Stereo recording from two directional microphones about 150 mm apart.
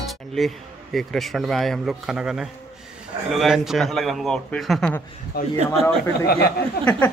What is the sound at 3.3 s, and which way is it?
A man's voice, centre (ahead or behind).